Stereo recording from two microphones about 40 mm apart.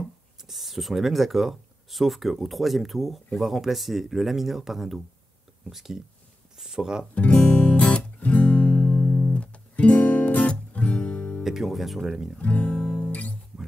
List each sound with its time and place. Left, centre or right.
0.4 s speech: centre
7.4 s guitar: left
8.2 s guitar: left
10.5 s music: left
11.4 s music: centre
12.4 s guitar: left